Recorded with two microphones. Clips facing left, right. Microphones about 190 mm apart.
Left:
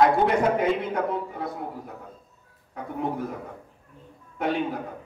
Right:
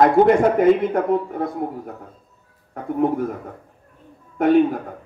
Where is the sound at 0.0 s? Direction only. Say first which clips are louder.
Right 6 dB; 50° right (ahead or behind).